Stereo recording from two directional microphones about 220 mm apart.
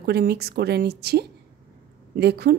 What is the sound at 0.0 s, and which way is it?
A woman's voice, 45° right (ahead or behind).